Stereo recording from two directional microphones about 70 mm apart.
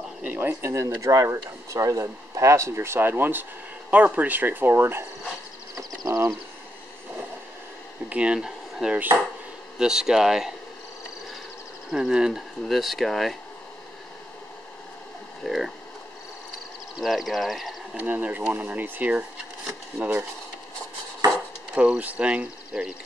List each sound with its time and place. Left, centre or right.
0.2 s speech: right
6.0 s speech: right
8.1 s speech: centre
8.4 s a sound: centre
9.8 s speech: centre
11.9 s speech: centre
15.4 s speech: centre
17.0 s speech: centre
17.9 s speech: right
21.7 s speech: centre